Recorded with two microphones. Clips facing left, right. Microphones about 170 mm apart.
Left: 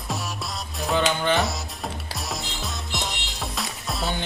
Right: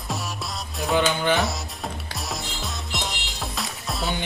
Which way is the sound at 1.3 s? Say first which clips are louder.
Even; centre (ahead or behind).